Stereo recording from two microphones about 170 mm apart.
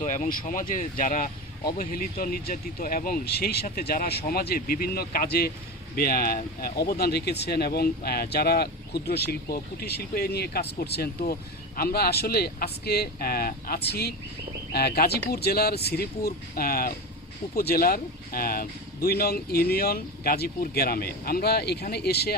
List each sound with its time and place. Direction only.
0.0 s speech: 45° left (ahead or behind); by 22.4 s 70° left (ahead or behind)